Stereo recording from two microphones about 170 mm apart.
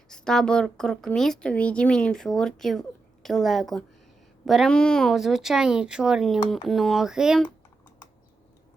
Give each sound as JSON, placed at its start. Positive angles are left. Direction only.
{"t": 0.1, "sound": "a woman's voice", "side_deg": 5}